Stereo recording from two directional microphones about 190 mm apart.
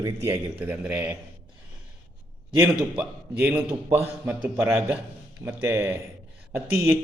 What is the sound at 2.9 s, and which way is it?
A man's voice, 5° right (ahead or behind).